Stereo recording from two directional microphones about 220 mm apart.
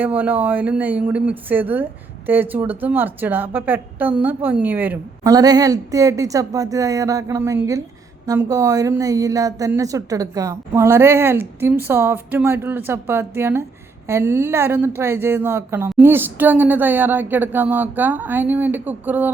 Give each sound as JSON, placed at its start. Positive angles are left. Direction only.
{"t": 0.0, "sound": "speech", "side_deg": -5}